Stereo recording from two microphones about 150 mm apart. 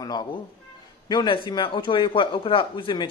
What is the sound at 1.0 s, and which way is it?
A man's voice, 30° left (ahead or behind).